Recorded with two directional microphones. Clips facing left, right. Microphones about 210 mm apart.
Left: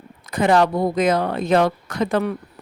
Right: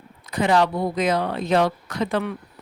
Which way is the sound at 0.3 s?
50° left (ahead or behind).